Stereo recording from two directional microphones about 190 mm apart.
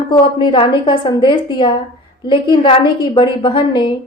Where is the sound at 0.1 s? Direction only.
20° left (ahead or behind).